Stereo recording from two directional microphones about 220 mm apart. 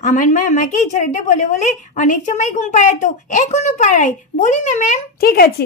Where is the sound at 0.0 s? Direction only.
35° left (ahead or behind).